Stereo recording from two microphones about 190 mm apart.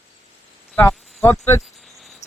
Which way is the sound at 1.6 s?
Centre (ahead or behind).